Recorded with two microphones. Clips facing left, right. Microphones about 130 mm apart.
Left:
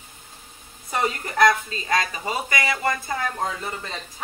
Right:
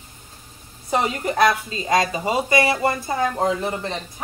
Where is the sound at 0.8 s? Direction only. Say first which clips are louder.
Right 4 dB; 20° right (ahead or behind).